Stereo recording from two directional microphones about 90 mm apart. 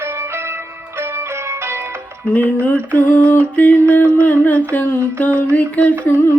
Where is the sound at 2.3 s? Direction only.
20° left (ahead or behind).